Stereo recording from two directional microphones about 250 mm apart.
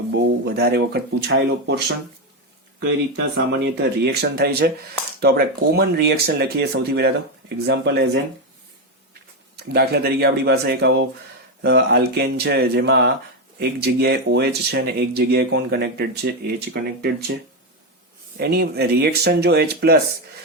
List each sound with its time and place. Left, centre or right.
0.1 s speech: right
3.3 s speech: right
9.7 s speech: right
18.3 s speech: right